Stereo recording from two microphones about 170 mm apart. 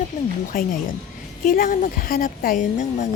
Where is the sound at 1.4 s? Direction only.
55° left (ahead or behind).